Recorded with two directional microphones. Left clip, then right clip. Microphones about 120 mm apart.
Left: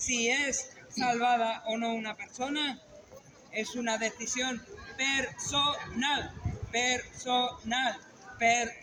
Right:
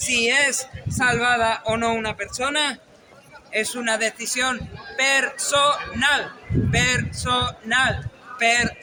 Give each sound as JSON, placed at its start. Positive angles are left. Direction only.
{"t": 0.1, "sound": "a man's voice", "side_deg": -35}